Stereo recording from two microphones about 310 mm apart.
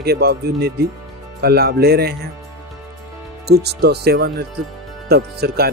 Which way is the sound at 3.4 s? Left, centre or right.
Right.